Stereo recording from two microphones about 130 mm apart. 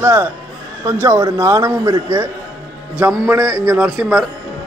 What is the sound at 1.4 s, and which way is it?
Speech, 25° right (ahead or behind).